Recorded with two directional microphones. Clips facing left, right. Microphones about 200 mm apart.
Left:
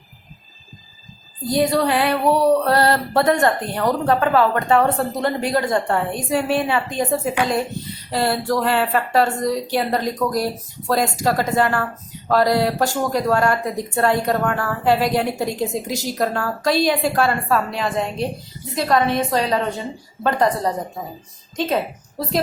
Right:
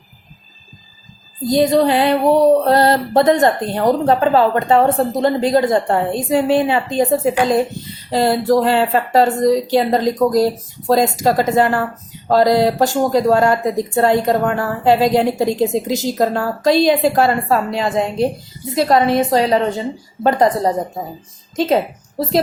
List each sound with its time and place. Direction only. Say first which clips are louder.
1.5 s female singing: right 5 dB; 20° right (ahead or behind)